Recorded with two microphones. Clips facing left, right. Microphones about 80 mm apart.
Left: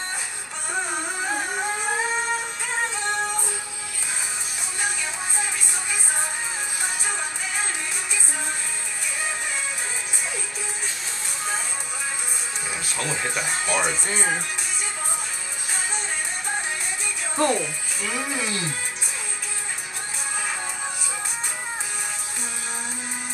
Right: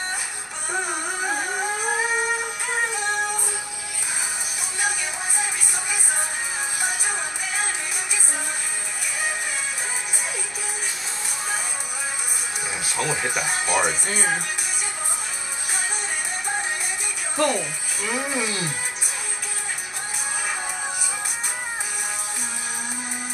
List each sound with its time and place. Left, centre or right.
6.8 s music: centre
12.9 s speech: centre
17.4 s speech: left
18.0 s speech: right